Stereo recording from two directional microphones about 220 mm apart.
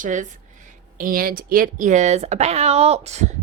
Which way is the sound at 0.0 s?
35° right (ahead or behind).